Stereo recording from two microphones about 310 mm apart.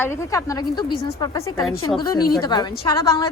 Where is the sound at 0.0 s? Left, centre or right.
Centre.